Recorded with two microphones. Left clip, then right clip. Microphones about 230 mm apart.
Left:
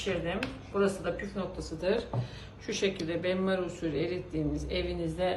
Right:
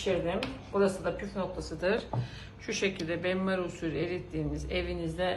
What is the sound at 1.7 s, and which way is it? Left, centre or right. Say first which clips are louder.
Speech: even; centre.